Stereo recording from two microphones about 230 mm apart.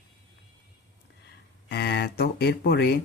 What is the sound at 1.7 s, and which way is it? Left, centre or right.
Speech, left.